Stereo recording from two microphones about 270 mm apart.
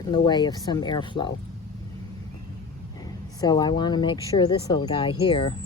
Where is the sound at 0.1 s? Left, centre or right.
Centre.